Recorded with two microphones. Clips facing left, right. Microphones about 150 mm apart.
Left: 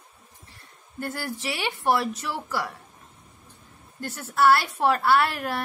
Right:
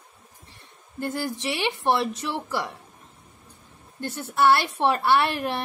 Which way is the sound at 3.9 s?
25° right (ahead or behind).